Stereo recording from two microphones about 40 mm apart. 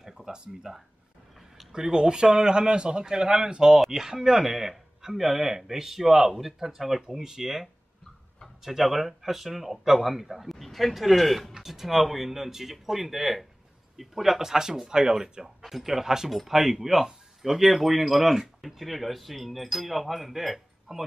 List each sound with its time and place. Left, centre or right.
0.0 s a sound: centre
1.7 s speech: centre
8.6 s speech: centre